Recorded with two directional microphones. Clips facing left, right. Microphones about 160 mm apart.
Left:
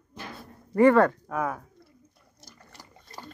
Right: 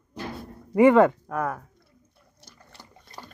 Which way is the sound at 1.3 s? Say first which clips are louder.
Right 1 dB; centre (ahead or behind).